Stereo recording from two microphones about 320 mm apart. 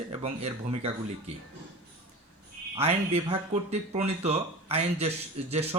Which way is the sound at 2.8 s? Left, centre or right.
Centre.